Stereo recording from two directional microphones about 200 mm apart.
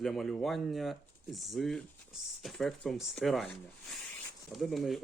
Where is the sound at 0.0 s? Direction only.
Centre (ahead or behind).